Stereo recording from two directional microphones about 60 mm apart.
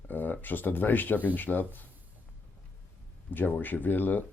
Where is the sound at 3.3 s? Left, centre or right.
Left.